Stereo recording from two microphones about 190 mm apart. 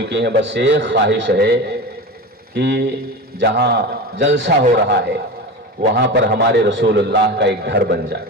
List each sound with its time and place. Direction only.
0.0 s a man's voice: 60° right (ahead or behind)
4.8 s a man's voice: 60° right (ahead or behind)